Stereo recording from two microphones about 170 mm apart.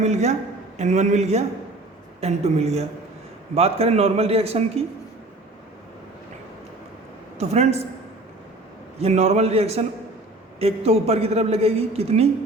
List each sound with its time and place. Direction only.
0.0 s a woman's voice: 40° right (ahead or behind)
7.3 s a woman's voice: 40° right (ahead or behind)
9.0 s a woman's voice: 40° right (ahead or behind)